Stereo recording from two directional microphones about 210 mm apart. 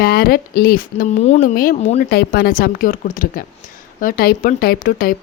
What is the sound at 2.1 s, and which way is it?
Speech, 45° left (ahead or behind).